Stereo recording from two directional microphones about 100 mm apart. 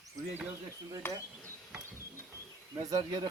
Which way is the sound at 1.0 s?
25° left (ahead or behind).